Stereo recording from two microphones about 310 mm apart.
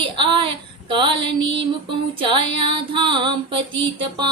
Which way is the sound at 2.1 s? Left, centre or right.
Centre.